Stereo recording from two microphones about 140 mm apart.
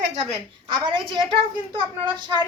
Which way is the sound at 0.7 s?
35° right (ahead or behind).